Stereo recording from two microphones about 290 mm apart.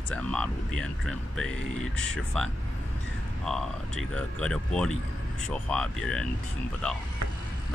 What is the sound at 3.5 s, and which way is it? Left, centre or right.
Speech, centre.